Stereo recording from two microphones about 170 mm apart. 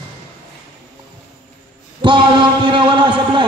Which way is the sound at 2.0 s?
25° right (ahead or behind).